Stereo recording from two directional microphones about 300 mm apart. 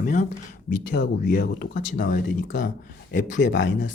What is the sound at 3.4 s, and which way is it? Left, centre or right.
Speech, left.